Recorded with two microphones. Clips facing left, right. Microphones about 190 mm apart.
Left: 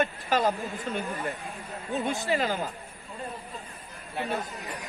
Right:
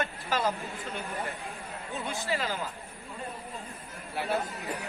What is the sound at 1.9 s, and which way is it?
Speech, 15° left (ahead or behind).